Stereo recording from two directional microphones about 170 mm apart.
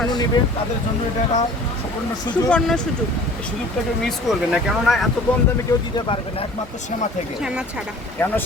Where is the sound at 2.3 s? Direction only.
5° left (ahead or behind).